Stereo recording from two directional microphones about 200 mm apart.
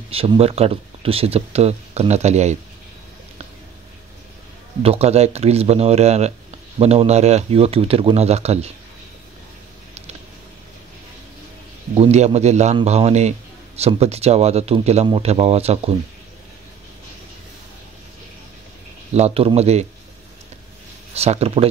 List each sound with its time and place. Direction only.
0.1 s a man's voice: 30° right (ahead or behind)
4.8 s a man's voice: 30° right (ahead or behind)
11.9 s a man's voice: 30° right (ahead or behind)
19.1 s a man's voice: 30° right (ahead or behind)
21.1 s a man's voice: 30° right (ahead or behind)